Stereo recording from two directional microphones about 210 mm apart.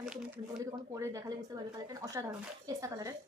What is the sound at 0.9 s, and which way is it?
Speech, 15° right (ahead or behind).